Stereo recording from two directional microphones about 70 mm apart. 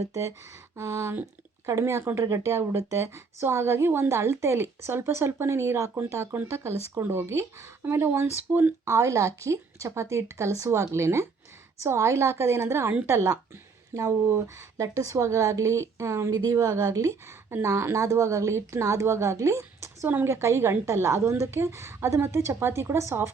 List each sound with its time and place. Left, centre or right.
0.1 s a woman's voice: right